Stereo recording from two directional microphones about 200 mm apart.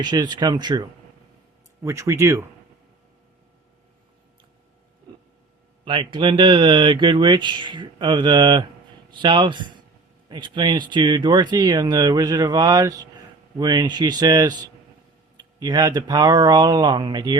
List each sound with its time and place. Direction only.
0.0 s speech: 20° right (ahead or behind)
5.8 s speech: 25° right (ahead or behind)